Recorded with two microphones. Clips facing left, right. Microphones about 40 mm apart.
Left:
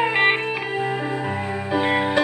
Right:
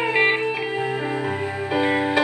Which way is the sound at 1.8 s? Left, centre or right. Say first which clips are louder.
Even; left.